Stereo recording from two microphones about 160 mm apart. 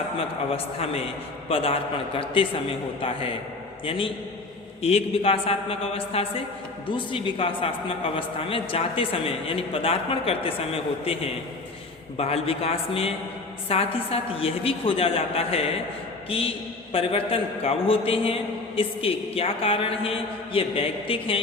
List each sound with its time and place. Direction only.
0.2 s speech: 35° left (ahead or behind)
3.8 s speech: 35° left (ahead or behind)